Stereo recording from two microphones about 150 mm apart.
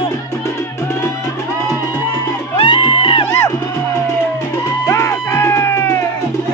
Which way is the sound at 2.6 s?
35° left (ahead or behind).